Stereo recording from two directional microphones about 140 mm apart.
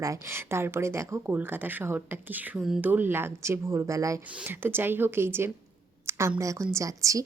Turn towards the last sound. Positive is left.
turn(degrees=-25)  # may be behind; listen again after turning